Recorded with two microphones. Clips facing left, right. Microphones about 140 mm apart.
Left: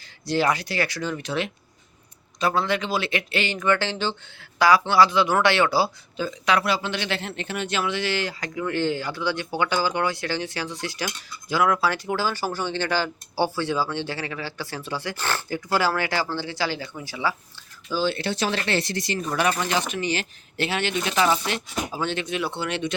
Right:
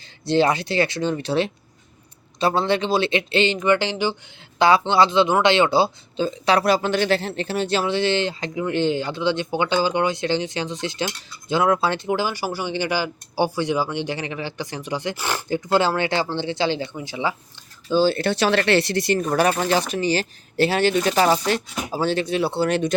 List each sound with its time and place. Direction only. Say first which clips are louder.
0.3 s speech: right 4 dB; 25° right (ahead or behind)
4.6 s speech: right 1 dB; 25° right (ahead or behind)
17.8 s speech: right 6 dB; 35° right (ahead or behind)
18.2 s speech: right 6 dB; 65° right (ahead or behind); by 23.0 s 40° right (ahead or behind)